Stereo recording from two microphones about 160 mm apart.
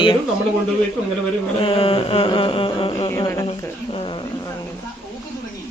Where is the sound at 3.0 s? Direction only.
20° left (ahead or behind).